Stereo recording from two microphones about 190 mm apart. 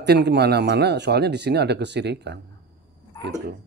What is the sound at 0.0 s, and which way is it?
Speech, 60° right (ahead or behind).